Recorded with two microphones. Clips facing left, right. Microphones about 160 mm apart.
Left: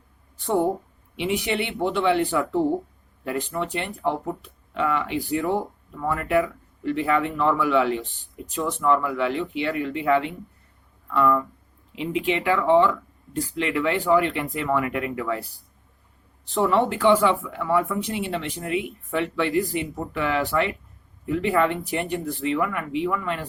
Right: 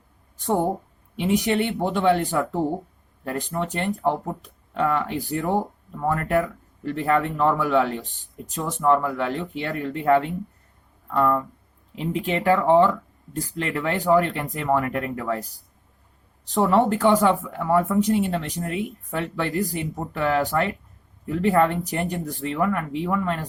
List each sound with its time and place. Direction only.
0.3 s speech: 40° right (ahead or behind)
16.5 s speech: 40° right (ahead or behind)